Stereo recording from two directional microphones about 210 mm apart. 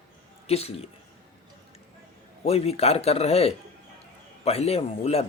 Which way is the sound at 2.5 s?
30° left (ahead or behind).